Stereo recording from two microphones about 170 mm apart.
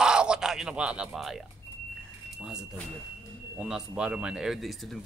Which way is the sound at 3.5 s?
5° right (ahead or behind).